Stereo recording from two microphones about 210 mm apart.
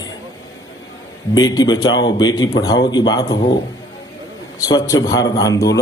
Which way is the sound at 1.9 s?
65° left (ahead or behind).